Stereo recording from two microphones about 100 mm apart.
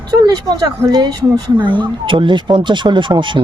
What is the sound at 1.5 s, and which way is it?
Speech, 55° right (ahead or behind).